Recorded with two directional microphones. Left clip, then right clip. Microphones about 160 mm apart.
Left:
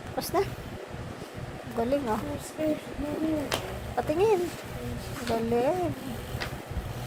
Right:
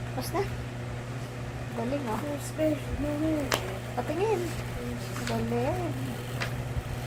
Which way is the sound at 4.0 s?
55° left (ahead or behind).